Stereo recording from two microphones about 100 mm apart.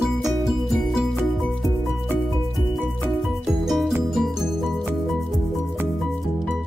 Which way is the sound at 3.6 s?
Centre (ahead or behind).